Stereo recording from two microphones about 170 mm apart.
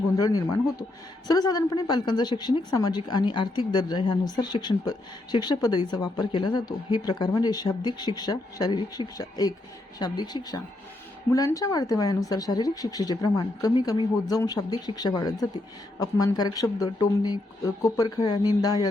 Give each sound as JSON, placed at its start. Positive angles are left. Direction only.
{"t": 0.2, "sound": "a woman's voice", "side_deg": 20}